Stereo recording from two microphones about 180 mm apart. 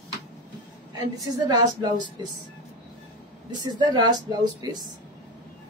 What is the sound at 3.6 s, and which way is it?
A woman's voice, 25° right (ahead or behind).